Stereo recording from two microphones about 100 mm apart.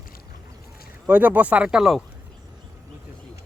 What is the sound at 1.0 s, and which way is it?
Speech, 15° right (ahead or behind).